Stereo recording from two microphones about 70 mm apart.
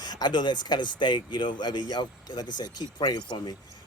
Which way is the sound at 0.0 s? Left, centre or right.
Left.